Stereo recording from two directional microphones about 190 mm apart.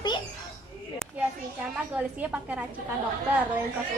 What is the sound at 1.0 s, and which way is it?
A woman's voice, 5° right (ahead or behind).